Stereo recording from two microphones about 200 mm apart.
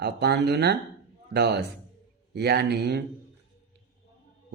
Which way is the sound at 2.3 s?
55° right (ahead or behind).